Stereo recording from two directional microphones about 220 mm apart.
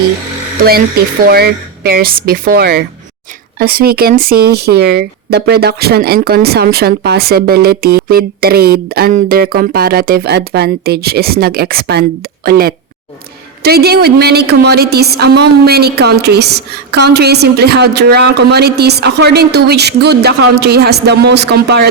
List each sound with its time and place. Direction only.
0.6 s speech: 45° right (ahead or behind)